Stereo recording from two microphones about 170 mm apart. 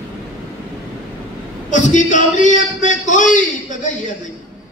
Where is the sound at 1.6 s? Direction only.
45° left (ahead or behind).